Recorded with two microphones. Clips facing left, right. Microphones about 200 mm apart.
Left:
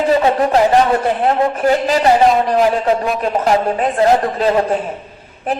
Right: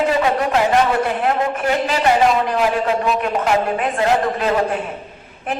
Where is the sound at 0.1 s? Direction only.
35° left (ahead or behind).